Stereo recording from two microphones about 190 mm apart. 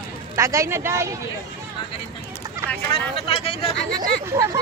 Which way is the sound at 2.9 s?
30° left (ahead or behind).